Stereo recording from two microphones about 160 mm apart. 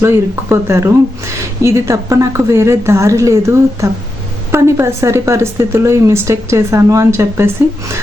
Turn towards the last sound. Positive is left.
turn(degrees=-15)  # may be behind; listen again after turning